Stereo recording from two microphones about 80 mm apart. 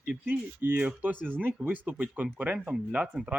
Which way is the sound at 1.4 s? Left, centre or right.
Right.